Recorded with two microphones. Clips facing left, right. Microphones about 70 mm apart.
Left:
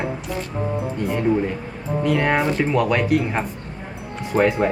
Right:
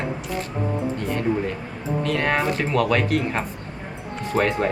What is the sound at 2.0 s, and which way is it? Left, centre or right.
Speech, centre.